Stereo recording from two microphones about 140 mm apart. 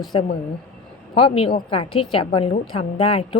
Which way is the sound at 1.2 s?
40° left (ahead or behind).